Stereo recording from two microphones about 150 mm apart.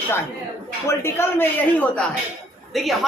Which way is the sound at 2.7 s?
Centre (ahead or behind).